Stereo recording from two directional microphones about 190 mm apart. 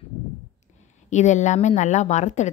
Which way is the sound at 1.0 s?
40° left (ahead or behind).